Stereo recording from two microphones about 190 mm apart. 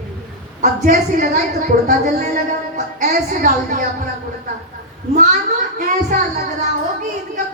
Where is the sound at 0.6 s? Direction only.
40° right (ahead or behind).